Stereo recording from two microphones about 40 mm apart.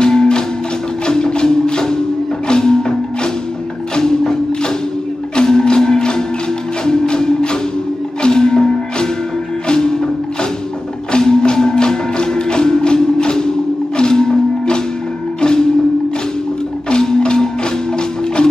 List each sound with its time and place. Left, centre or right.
0.0 s music: centre
3.9 s music: centre
11.1 s music: centre
16.9 s music: left